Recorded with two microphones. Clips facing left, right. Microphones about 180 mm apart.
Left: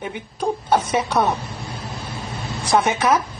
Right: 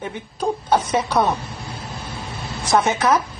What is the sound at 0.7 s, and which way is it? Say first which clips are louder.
Speech: even; 10° left (ahead or behind).